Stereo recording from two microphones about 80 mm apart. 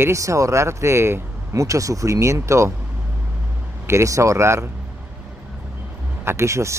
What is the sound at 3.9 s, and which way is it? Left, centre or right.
Speech, right.